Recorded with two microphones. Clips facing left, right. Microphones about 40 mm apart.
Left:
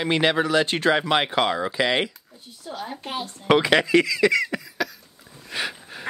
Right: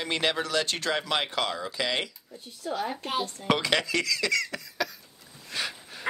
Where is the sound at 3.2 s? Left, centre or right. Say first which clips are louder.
Left 10 dB; left.